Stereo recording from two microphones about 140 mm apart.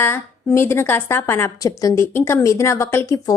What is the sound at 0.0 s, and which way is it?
A woman's voice, 15° left (ahead or behind).